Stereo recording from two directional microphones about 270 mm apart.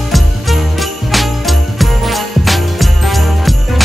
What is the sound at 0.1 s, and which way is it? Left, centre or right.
Jingle bell, centre.